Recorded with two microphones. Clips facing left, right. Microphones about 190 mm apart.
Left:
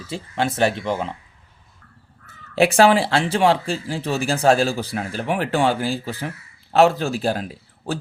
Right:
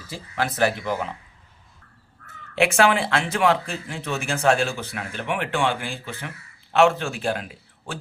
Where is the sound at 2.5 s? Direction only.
35° left (ahead or behind).